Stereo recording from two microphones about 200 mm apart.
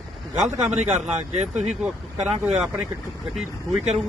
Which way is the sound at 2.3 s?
5° right (ahead or behind).